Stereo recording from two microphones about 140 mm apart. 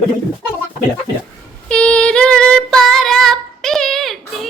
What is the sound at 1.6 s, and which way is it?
Female singing, 5° left (ahead or behind).